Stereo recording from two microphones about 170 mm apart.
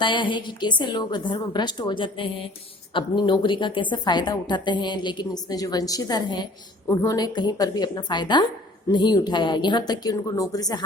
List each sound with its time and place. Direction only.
0.0 s a woman's voice: 30° left (ahead or behind)